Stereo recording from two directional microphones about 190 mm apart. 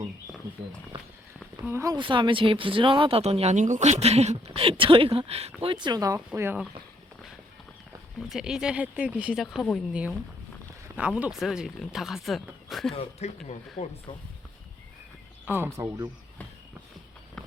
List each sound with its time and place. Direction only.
1.6 s speech: 15° right (ahead or behind)
8.3 s speech: 5° right (ahead or behind)
12.9 s speech: 30° left (ahead or behind)
15.4 s speech: 10° right (ahead or behind)